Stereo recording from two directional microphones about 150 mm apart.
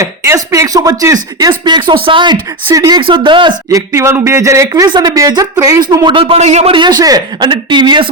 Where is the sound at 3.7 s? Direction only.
20° right (ahead or behind).